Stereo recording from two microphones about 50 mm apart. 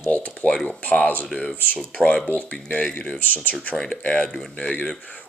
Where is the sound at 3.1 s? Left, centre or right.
Left.